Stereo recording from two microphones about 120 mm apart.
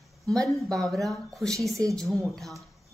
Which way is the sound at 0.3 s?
5° left (ahead or behind).